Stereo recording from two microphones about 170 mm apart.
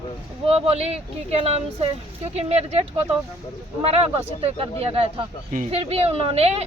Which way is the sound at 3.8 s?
35° right (ahead or behind).